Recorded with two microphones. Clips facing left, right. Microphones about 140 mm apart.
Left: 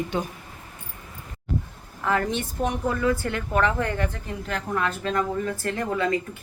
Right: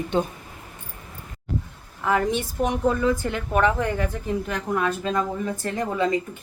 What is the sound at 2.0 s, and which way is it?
A woman's voice, 10° right (ahead or behind).